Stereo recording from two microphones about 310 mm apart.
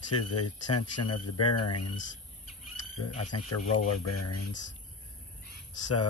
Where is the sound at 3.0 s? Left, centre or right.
Left.